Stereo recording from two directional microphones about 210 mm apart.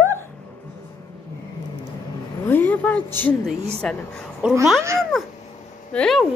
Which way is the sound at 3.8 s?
5° left (ahead or behind).